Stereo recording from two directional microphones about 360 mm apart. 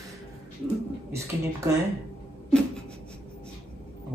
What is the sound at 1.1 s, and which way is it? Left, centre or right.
Speech, centre.